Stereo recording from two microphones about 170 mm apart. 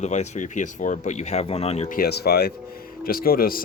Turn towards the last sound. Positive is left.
turn(degrees=60)  # may be behind; listen again after turning